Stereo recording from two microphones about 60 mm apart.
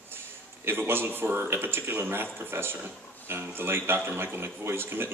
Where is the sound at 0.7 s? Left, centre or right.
Right.